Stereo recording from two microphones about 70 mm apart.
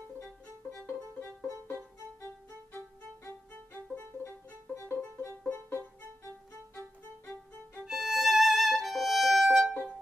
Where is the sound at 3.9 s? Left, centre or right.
Left.